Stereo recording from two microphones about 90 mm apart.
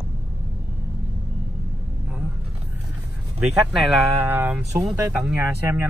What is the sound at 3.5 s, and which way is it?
Speech, centre (ahead or behind).